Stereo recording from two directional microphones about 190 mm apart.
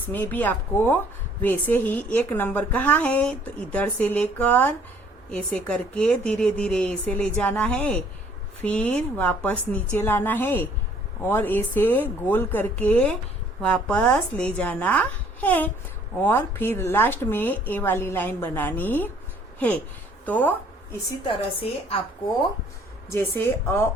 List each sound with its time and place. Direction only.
0.1 s a woman's voice: 10° left (ahead or behind)
21.2 s a woman's voice: 30° left (ahead or behind)
23.1 s a woman's voice: 10° left (ahead or behind)